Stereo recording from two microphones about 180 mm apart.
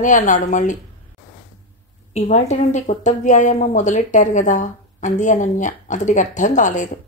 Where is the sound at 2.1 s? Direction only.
40° left (ahead or behind).